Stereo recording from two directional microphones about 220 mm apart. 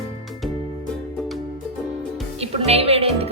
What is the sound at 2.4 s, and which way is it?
Music, 30° right (ahead or behind).